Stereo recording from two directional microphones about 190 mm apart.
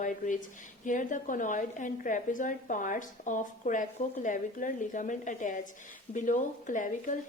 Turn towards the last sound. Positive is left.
turn(degrees=40)  # may be behind; listen again after turning